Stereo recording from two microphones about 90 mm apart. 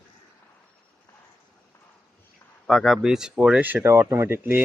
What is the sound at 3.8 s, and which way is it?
Speech, 30° right (ahead or behind).